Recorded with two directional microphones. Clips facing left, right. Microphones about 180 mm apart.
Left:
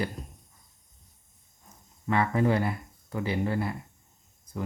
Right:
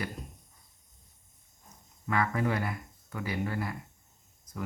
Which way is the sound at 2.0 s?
25° left (ahead or behind).